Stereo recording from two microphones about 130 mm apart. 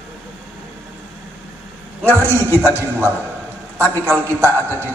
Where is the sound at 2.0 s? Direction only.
15° right (ahead or behind).